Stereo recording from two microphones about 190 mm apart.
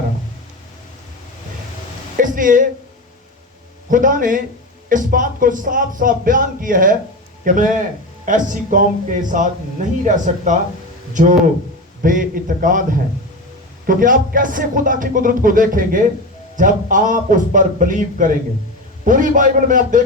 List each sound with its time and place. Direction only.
2.1 s a woman's voice: 45° right (ahead or behind)
3.8 s a man's voice: 45° right (ahead or behind)
13.8 s speech: 45° right (ahead or behind)